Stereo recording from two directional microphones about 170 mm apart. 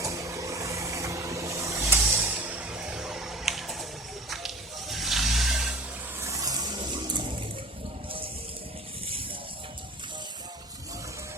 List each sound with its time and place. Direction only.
0.0 s vehicle: 20° right (ahead or behind); by 3.8 s centre (ahead or behind)
4.3 s music: centre (ahead or behind)
6.1 s a sound: 20° right (ahead or behind)